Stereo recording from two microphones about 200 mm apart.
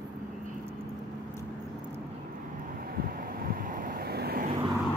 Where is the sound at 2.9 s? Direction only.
50° right (ahead or behind).